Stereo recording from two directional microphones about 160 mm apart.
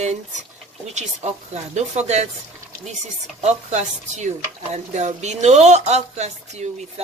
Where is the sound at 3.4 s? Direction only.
45° right (ahead or behind).